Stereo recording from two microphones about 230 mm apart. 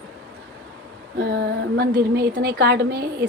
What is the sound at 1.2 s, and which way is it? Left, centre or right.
Speech, right.